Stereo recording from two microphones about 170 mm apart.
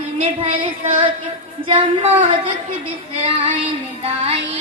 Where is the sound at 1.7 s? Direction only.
30° right (ahead or behind).